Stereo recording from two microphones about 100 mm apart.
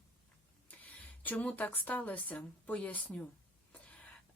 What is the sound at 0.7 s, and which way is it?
Speech, 15° left (ahead or behind).